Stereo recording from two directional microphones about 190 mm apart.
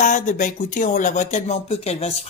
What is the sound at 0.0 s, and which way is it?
Speech, 40° left (ahead or behind).